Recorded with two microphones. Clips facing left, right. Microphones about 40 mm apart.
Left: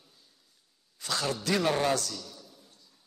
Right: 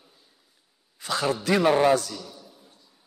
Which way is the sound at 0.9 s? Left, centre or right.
Centre.